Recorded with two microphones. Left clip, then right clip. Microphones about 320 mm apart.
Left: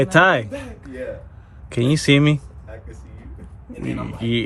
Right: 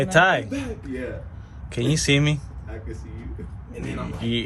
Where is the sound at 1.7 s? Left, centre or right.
Centre.